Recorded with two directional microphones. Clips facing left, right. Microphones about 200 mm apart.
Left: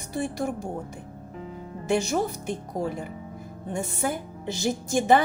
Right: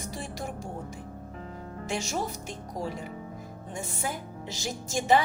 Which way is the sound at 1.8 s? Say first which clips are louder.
Left 8 dB; 60° left (ahead or behind).